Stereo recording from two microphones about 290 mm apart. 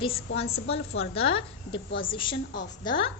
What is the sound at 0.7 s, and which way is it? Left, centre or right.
A woman's voice, centre.